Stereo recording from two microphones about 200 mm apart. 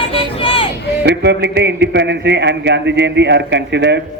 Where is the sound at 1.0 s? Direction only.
60° right (ahead or behind).